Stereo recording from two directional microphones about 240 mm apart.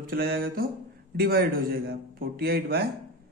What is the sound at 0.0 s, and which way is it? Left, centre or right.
Speech, right.